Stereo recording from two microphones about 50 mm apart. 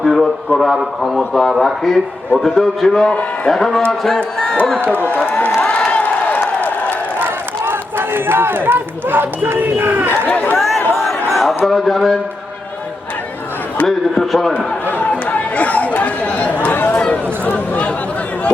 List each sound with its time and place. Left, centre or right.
0.0 s a sound: centre
0.8 s a man's voice: centre
4.8 s speech: right
5.0 s speech: left
5.5 s crowd: left
6.0 s a sound: left
7.2 s speech: right
10.2 s speech: left
10.9 s crowd: centre
13.8 s a man's voice: centre
14.9 s chatter: left
17.0 s speech: left